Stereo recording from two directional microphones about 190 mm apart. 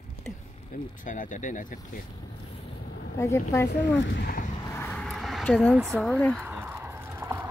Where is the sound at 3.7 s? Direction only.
65° left (ahead or behind).